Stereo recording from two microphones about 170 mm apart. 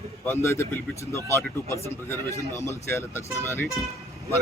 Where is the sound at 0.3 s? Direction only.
15° left (ahead or behind).